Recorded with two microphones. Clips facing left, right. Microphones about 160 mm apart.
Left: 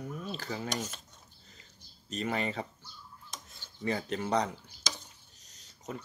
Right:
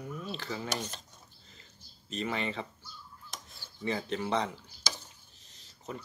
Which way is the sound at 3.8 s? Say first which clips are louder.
Even; 40° left (ahead or behind).